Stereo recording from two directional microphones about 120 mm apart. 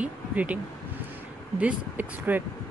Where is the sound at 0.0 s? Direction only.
10° right (ahead or behind).